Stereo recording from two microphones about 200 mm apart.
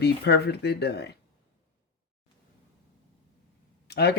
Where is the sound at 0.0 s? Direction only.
55° left (ahead or behind).